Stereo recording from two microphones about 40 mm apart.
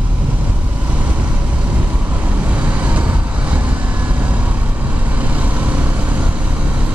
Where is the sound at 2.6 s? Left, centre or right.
Right.